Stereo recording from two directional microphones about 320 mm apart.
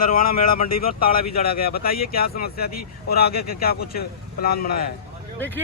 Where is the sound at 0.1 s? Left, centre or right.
Left.